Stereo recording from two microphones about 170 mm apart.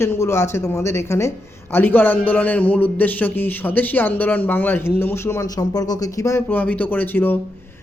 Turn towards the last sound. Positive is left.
turn(degrees=10)  # may be behind; listen again after turning